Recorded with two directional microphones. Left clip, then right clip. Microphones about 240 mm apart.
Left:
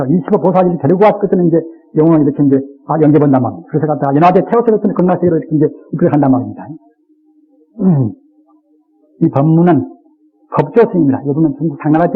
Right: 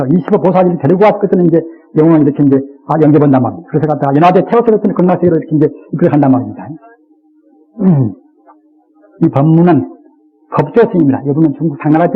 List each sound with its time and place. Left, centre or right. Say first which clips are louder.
0.0 s a man's voice: right 1 dB; left
7.8 s a sound: right 2 dB; left
9.5 s a man's voice: right 2 dB; left